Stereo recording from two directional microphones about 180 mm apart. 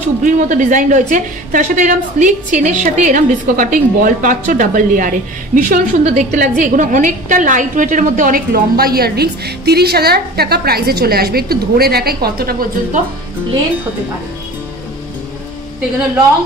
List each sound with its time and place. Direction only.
0.2 s a woman's voice: 45° right (ahead or behind)